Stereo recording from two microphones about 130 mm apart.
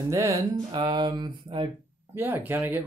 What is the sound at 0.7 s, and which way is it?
Speech, 35° right (ahead or behind).